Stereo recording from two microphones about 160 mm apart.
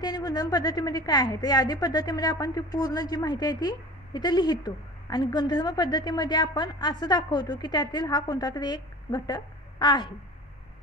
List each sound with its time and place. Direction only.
0.0 s a woman's voice: 25° left (ahead or behind)